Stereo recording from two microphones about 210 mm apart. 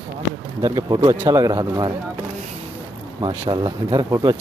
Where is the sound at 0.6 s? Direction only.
20° right (ahead or behind).